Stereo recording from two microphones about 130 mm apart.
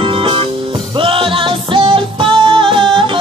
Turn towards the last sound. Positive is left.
turn(degrees=-40)  # may be behind; listen again after turning